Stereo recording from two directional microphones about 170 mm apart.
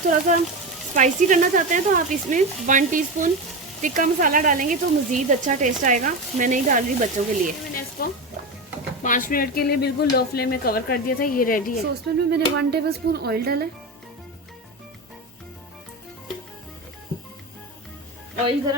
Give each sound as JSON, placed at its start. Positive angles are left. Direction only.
{"t": 0.1, "sound": "speech", "side_deg": -45}
{"t": 7.7, "sound": "speech", "side_deg": 60}
{"t": 12.3, "sound": "speech", "side_deg": -70}